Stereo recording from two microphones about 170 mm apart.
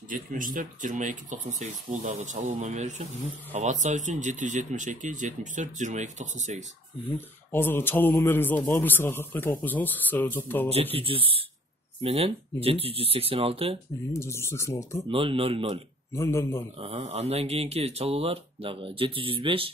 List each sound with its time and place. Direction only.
0.1 s speech: 50° right (ahead or behind)
7.2 s speech: 15° left (ahead or behind)
10.7 s speech: 35° right (ahead or behind)
14.1 s speech: 15° left (ahead or behind)
15.0 s speech: 30° right (ahead or behind)
16.1 s speech: 15° left (ahead or behind)
16.7 s speech: 35° right (ahead or behind)